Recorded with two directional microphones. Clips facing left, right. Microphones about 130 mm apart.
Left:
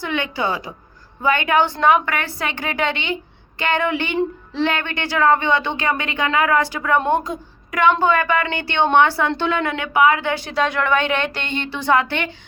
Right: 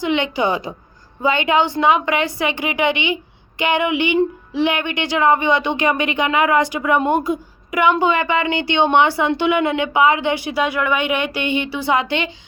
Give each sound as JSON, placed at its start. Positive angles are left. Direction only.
{"t": 0.0, "sound": "a woman's voice", "side_deg": -20}